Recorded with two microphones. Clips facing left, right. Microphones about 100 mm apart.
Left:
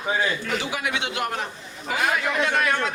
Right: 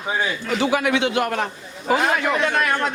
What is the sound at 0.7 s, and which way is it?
Speech, 55° right (ahead or behind).